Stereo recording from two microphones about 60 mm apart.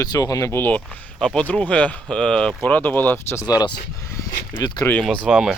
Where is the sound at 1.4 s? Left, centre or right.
Left.